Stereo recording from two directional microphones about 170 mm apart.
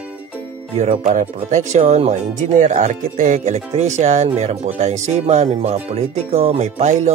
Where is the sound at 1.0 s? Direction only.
45° right (ahead or behind).